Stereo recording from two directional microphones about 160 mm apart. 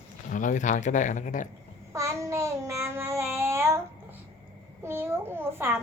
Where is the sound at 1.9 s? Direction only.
20° right (ahead or behind).